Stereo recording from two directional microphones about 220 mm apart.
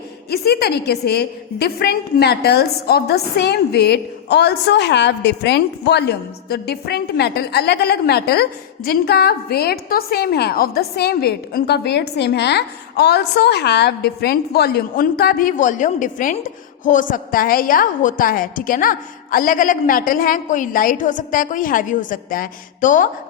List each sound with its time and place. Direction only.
0.3 s a woman's voice: 50° left (ahead or behind)